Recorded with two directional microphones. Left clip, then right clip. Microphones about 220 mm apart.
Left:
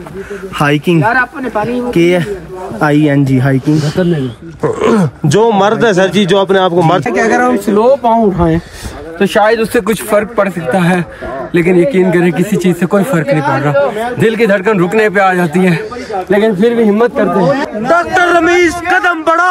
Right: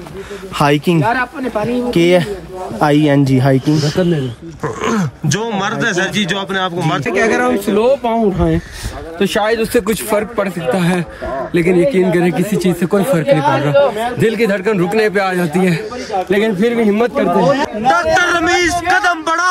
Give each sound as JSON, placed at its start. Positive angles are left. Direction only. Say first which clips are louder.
{"t": 0.6, "sound": "speech", "louder": "left 2 dB", "side_deg": -45}
{"t": 1.0, "sound": "speech", "louder": "left 4 dB", "side_deg": 0}
{"t": 2.0, "sound": "speech", "louder": "left 1 dB", "side_deg": -45}
{"t": 3.7, "sound": "speech", "louder": "left 2 dB", "side_deg": -5}
{"t": 7.7, "sound": "speech", "louder": "left 6 dB", "side_deg": 15}
{"t": 8.4, "sound": "speech", "louder": "left 4 dB", "side_deg": 5}
{"t": 13.8, "sound": "speech", "louder": "left 1 dB", "side_deg": -40}
{"t": 14.2, "sound": "speech", "louder": "left 5 dB", "side_deg": 0}
{"t": 16.3, "sound": "speech", "louder": "left 6 dB", "side_deg": 15}
{"t": 17.8, "sound": "speech", "louder": "left 2 dB", "side_deg": -5}